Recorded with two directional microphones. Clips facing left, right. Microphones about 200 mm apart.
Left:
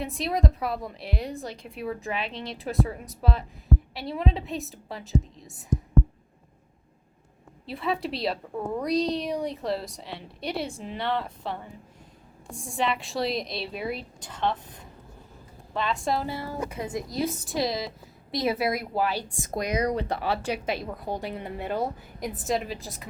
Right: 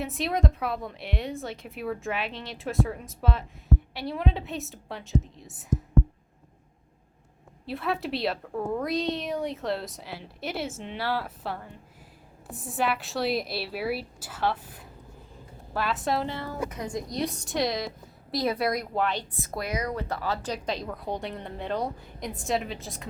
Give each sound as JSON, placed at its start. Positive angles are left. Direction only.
{"t": 0.0, "sound": "a woman's voice", "side_deg": 0}
{"t": 7.7, "sound": "a woman's voice", "side_deg": 0}
{"t": 16.2, "sound": "speech", "side_deg": 10}
{"t": 16.7, "sound": "a woman's voice", "side_deg": 25}
{"t": 17.1, "sound": "a woman's voice", "side_deg": 5}
{"t": 19.5, "sound": "a woman's voice", "side_deg": 20}